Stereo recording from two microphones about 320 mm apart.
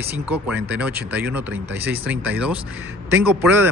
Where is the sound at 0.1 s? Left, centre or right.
Centre.